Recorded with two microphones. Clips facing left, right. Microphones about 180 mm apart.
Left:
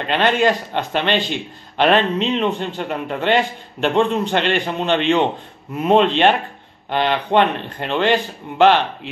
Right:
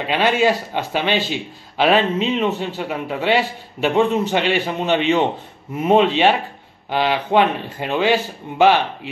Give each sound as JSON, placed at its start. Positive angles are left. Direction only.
{"t": 0.0, "sound": "a man's voice", "side_deg": -5}